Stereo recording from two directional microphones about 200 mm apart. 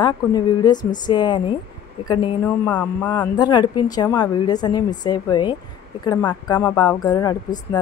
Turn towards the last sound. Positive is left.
turn(degrees=20)  # may be behind; listen again after turning